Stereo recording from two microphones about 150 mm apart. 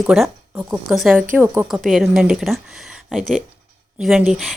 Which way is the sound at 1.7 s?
Centre (ahead or behind).